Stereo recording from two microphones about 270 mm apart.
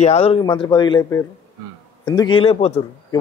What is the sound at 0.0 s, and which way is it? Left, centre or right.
Speech, left.